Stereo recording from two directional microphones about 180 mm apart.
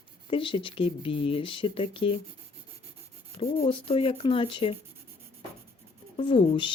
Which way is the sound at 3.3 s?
30° left (ahead or behind).